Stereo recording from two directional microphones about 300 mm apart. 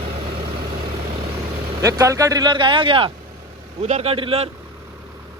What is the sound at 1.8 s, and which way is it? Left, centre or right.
Speech, centre.